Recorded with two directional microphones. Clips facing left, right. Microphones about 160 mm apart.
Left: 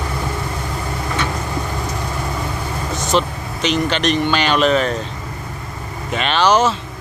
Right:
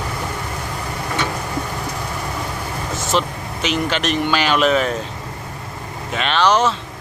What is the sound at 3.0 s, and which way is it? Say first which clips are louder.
Speech: left 2 dB; centre (ahead or behind).